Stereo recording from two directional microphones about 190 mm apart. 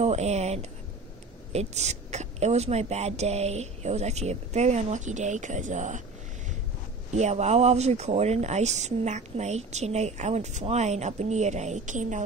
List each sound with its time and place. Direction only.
0.0 s a sound: 35° right (ahead or behind)
1.5 s speech: 35° right (ahead or behind)
7.2 s speech: 35° right (ahead or behind)